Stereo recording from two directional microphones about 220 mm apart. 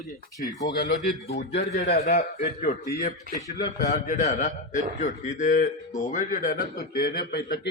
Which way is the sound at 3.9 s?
35° left (ahead or behind).